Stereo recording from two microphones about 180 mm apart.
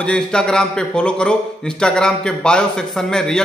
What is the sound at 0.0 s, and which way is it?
A man's voice, 5° left (ahead or behind).